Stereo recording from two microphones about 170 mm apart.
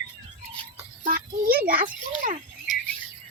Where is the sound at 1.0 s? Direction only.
60° right (ahead or behind).